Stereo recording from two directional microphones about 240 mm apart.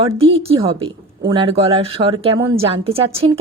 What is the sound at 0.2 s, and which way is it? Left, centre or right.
A woman's voice, right.